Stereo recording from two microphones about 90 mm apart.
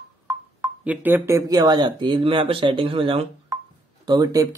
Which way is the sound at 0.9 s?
20° right (ahead or behind).